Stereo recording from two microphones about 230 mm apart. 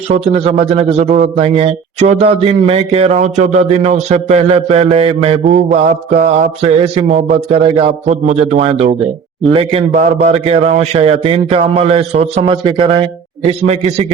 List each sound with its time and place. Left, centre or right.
0.1 s a man's voice: right